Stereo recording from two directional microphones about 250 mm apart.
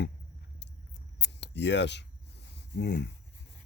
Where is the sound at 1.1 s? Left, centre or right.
Left.